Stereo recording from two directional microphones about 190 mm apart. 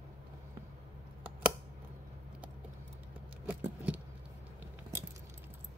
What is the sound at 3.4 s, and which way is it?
Keys jangling, 5° right (ahead or behind).